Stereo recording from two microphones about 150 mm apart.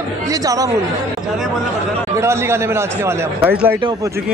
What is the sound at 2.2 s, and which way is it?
A man's voice, 15° right (ahead or behind).